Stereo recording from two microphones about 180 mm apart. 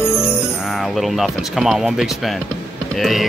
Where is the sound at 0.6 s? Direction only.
Centre (ahead or behind).